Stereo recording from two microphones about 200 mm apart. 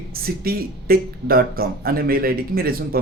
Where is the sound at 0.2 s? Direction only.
50° right (ahead or behind).